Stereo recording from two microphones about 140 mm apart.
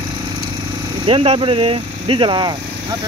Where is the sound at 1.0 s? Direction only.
40° right (ahead or behind).